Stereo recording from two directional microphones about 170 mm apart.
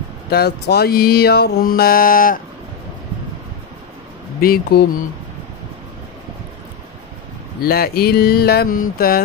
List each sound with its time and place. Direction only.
0.3 s mantra: 70° left (ahead or behind); by 2.4 s 55° left (ahead or behind)
4.4 s mantra: 65° left (ahead or behind)
7.6 s mantra: 65° left (ahead or behind)